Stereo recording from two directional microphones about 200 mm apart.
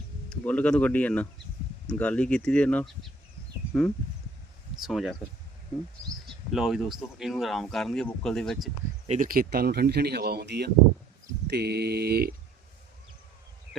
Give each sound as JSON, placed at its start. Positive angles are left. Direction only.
{"t": 0.3, "sound": "speech", "side_deg": 5}
{"t": 4.8, "sound": "speech", "side_deg": 0}
{"t": 6.5, "sound": "speech", "side_deg": 0}
{"t": 9.0, "sound": "speech", "side_deg": -40}